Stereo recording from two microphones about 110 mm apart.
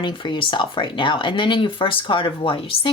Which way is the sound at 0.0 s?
50° left (ahead or behind).